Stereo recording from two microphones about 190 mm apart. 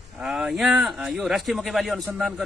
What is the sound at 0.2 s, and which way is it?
Speech, 5° right (ahead or behind).